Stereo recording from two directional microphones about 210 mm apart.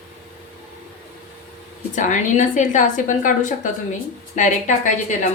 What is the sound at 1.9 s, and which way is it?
A woman's voice, 35° left (ahead or behind).